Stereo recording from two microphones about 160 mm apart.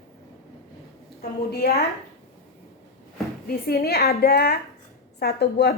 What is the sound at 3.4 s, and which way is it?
A woman's voice, 75° left (ahead or behind).